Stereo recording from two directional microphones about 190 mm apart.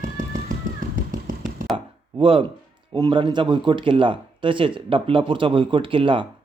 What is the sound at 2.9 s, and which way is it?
Speech, 25° right (ahead or behind).